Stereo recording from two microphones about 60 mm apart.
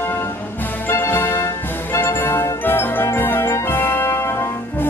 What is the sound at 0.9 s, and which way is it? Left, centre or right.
Music, left.